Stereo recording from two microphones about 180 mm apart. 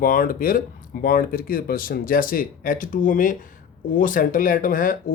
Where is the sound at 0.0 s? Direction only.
50° left (ahead or behind).